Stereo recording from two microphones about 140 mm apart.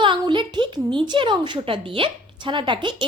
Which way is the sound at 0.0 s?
35° right (ahead or behind).